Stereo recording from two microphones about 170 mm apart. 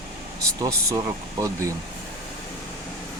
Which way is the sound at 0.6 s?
20° right (ahead or behind).